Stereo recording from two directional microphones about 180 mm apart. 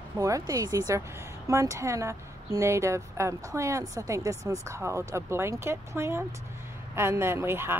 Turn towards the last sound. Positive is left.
turn(degrees=-15)  # may be behind; listen again after turning